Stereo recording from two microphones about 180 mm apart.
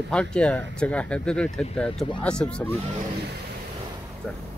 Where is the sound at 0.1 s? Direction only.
5° left (ahead or behind).